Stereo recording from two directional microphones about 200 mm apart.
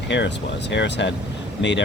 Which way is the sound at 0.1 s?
60° left (ahead or behind).